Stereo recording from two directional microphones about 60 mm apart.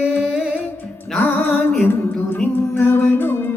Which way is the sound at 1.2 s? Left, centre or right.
Left.